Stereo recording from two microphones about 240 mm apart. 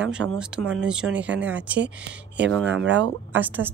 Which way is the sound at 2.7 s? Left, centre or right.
Right.